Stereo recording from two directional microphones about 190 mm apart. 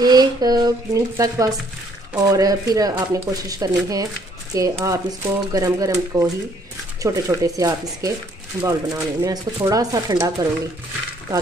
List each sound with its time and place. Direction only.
0.0 s speech: 20° right (ahead or behind)